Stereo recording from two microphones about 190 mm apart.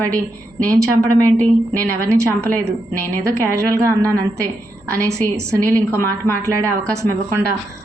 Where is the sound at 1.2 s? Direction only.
10° left (ahead or behind).